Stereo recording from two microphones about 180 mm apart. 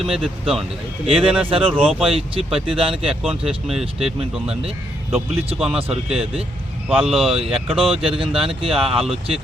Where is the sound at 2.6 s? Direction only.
30° right (ahead or behind).